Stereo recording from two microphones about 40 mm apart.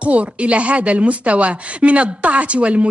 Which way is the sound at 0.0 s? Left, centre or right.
Right.